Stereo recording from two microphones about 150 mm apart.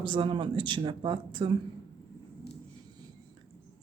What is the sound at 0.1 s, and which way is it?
Speech, 35° right (ahead or behind).